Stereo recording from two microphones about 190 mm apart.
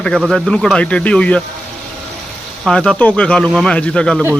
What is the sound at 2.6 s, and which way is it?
Speech, 5° left (ahead or behind).